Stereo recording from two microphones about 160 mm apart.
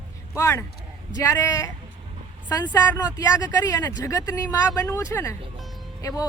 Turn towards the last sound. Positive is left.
turn(degrees=20)  # may be behind; listen again after turning